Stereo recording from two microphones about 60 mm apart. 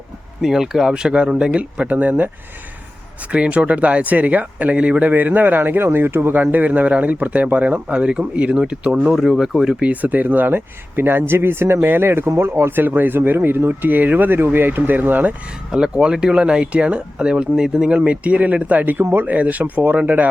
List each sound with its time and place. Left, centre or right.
0.4 s speech: centre; by 2.3 s right
3.3 s speech: centre
5.1 s speech: right
9.1 s speech: centre
9.6 s speech: right
12.8 s speech: right
15.7 s speech: centre